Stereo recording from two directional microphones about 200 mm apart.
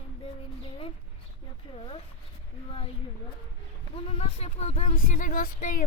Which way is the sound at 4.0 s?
30° left (ahead or behind).